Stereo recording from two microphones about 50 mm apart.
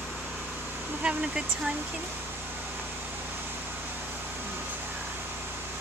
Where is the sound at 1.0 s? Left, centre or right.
Centre.